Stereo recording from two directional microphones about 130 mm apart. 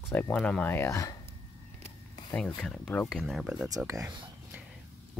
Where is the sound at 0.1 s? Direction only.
10° left (ahead or behind).